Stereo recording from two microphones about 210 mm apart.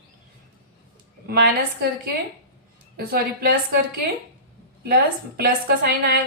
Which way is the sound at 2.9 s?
45° right (ahead or behind).